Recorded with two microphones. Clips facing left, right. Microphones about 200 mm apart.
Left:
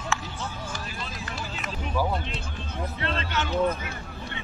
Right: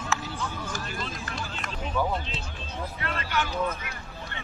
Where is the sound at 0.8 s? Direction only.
5° left (ahead or behind).